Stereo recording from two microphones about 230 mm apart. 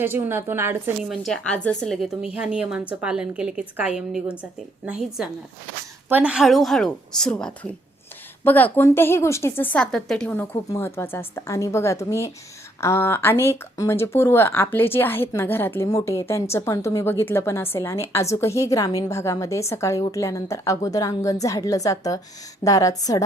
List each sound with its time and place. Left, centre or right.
0.0 s speech: centre